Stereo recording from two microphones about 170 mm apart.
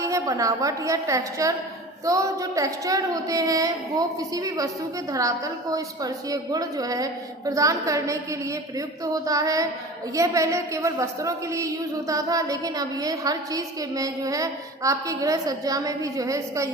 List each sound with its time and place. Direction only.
0.0 s a woman's voice: 20° right (ahead or behind)
5.7 s a woman's voice: 20° right (ahead or behind)